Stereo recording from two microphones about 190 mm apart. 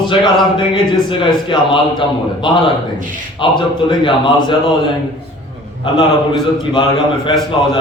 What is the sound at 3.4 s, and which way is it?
A man's voice, 25° left (ahead or behind).